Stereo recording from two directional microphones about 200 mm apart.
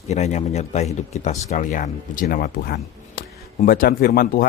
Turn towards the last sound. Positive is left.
turn(degrees=45)  # may be behind; listen again after turning